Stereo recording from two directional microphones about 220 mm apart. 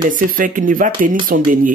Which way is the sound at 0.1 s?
40° right (ahead or behind).